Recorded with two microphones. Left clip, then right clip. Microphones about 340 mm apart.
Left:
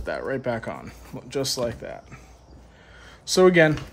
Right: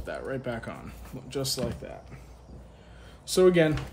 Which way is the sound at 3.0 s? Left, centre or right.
Left.